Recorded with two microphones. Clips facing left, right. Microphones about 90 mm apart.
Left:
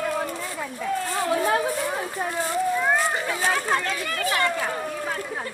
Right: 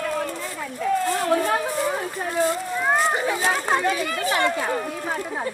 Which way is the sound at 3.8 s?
15° right (ahead or behind).